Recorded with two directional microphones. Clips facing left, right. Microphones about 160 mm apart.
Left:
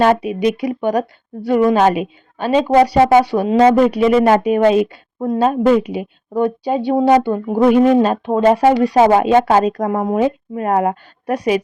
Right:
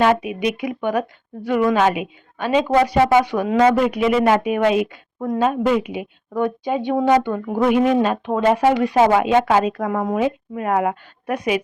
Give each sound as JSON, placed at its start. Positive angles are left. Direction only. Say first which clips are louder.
{"t": 0.0, "sound": "a woman's voice", "louder": "left 4 dB", "side_deg": 35}